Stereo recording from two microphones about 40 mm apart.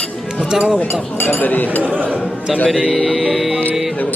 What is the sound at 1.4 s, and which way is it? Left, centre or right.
Speech, left.